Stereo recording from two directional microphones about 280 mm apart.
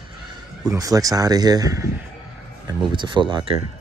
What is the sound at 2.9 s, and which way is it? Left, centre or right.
Speech, centre.